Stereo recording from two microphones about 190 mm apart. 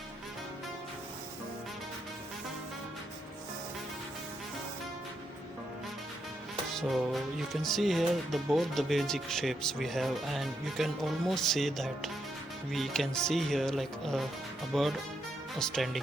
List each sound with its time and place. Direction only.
6.7 s music: centre (ahead or behind)